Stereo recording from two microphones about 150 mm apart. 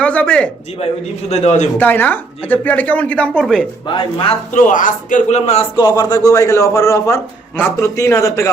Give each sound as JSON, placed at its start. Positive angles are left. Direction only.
{"t": 0.0, "sound": "speech", "side_deg": 10}
{"t": 1.3, "sound": "a man's voice", "side_deg": 45}
{"t": 1.8, "sound": "speech", "side_deg": 10}
{"t": 3.8, "sound": "speech", "side_deg": 35}
{"t": 4.5, "sound": "a man's voice", "side_deg": 60}
{"t": 5.7, "sound": "a man's voice", "side_deg": 30}